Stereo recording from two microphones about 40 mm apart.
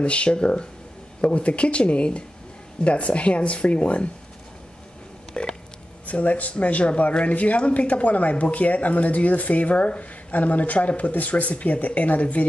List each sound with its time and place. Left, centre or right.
0.0 s speech: left
5.3 s a sound: left
6.0 s speech: left